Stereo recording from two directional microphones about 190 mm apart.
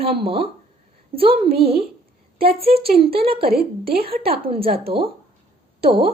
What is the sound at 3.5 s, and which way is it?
Speech, 55° right (ahead or behind).